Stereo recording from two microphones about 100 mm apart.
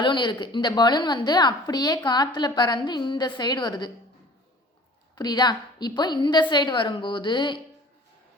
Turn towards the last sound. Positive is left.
turn(degrees=55)  # may be behind; listen again after turning